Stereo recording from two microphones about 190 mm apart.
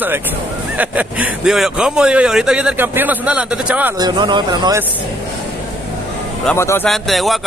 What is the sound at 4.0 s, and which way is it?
Speech, 20° right (ahead or behind).